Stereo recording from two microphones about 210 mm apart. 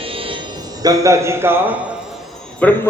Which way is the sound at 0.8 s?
15° right (ahead or behind).